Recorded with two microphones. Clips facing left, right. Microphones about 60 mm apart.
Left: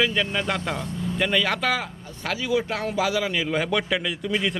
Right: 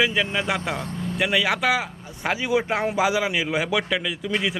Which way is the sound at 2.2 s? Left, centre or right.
Right.